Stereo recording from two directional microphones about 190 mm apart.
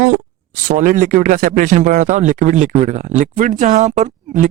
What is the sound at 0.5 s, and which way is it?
Speech, 45° right (ahead or behind).